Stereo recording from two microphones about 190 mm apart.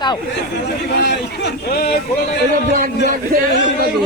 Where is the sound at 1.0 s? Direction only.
65° left (ahead or behind).